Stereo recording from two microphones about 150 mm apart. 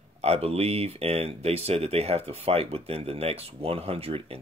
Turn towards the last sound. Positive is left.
turn(degrees=-40)  # may be behind; listen again after turning